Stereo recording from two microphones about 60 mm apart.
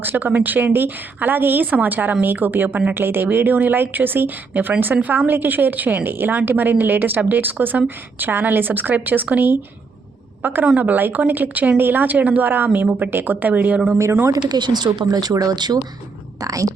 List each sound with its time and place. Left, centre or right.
0.0 s a woman's voice: right
15.0 s speech: right
16.4 s speech: right